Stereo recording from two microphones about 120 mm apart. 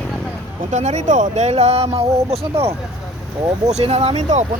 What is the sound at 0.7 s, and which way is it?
Speech, 80° right.